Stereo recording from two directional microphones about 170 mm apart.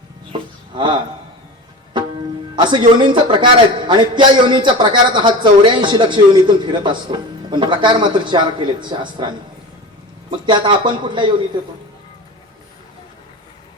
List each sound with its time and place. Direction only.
0.7 s speech: 30° right (ahead or behind)
10.4 s speech: 30° right (ahead or behind)